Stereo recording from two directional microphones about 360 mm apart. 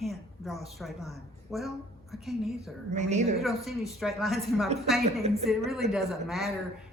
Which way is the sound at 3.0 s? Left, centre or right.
Centre.